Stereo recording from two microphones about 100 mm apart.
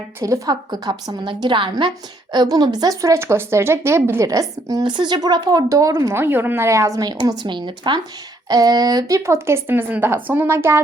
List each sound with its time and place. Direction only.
0.2 s a woman's voice: 35° right (ahead or behind); by 1.7 s 55° right (ahead or behind)
2.3 s speech: 45° right (ahead or behind)
6.1 s speech: 20° right (ahead or behind)